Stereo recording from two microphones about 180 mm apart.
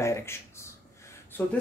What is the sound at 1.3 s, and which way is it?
Speech, 10° left (ahead or behind).